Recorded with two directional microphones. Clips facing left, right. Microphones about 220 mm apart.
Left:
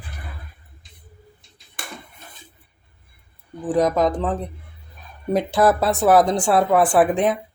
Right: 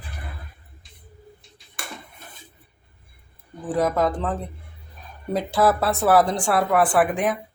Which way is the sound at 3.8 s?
15° left (ahead or behind).